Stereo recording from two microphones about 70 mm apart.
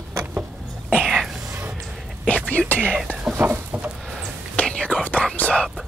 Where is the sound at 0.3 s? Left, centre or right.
Right.